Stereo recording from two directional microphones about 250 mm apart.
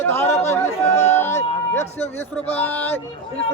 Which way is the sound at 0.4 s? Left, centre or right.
Centre.